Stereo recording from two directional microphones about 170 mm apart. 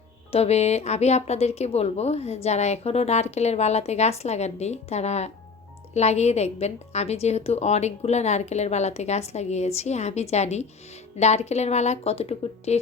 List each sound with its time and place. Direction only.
0.3 s a woman's voice: 40° left (ahead or behind)